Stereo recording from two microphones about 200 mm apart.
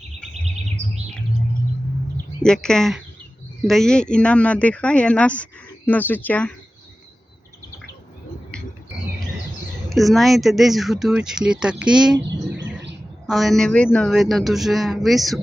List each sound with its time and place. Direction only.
2.1 s speech: 5° left (ahead or behind)
9.9 s speech: centre (ahead or behind)
12.5 s bird: 60° right (ahead or behind)
13.2 s speech: centre (ahead or behind)